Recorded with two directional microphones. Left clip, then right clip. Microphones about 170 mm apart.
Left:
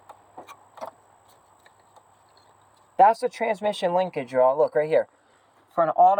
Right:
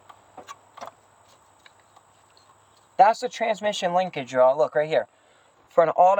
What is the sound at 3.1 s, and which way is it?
Speech, 50° right (ahead or behind).